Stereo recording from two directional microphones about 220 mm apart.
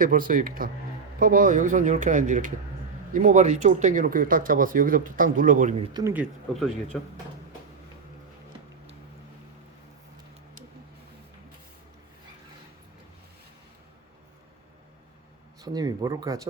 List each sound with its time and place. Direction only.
0.0 s speech: 40° right (ahead or behind)
5.9 s speech: 15° right (ahead or behind); by 7.1 s 5° left (ahead or behind)
15.6 s speech: 20° right (ahead or behind)